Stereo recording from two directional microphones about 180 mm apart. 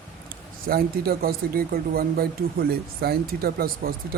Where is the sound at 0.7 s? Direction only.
55° right (ahead or behind).